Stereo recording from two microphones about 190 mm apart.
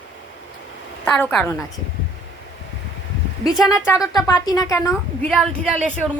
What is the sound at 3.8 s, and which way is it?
A woman's voice, 15° left (ahead or behind).